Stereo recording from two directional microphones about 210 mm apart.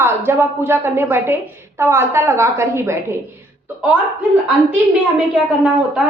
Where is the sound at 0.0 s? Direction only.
10° right (ahead or behind).